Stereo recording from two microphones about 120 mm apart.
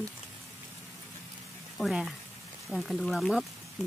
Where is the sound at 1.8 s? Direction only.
Centre (ahead or behind).